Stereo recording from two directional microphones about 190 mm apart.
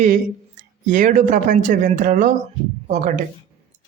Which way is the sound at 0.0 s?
40° right (ahead or behind).